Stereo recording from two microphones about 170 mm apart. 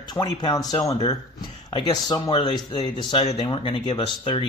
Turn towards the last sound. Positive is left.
turn(degrees=30)  # may be behind; listen again after turning